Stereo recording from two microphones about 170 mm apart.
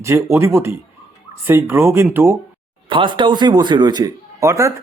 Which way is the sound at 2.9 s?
30° right (ahead or behind).